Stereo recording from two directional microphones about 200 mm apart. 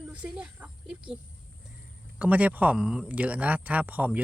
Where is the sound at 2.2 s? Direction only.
5° right (ahead or behind).